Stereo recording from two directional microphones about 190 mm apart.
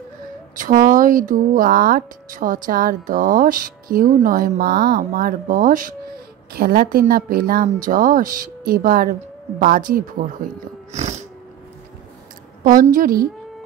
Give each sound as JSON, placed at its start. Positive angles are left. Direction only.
{"t": 0.6, "sound": "speech", "side_deg": -45}
{"t": 12.6, "sound": "speech", "side_deg": -45}